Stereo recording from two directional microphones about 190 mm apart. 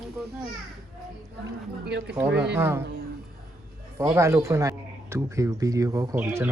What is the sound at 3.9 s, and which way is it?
Speech, 15° right (ahead or behind).